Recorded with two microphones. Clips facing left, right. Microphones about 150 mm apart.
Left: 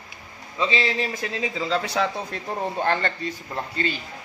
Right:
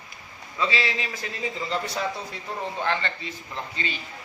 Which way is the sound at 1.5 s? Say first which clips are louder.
Left 5 dB; 90° left.